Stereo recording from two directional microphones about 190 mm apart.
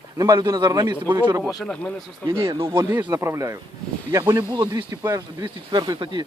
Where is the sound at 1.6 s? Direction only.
5° left (ahead or behind).